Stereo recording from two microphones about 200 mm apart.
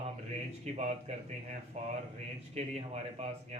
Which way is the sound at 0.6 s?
35° right (ahead or behind).